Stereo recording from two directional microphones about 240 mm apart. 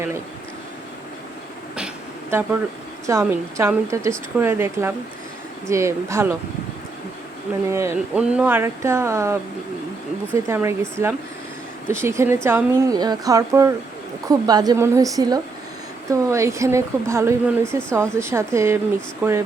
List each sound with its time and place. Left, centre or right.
3.1 s speech: centre
7.7 s speech: centre
10.5 s speech: centre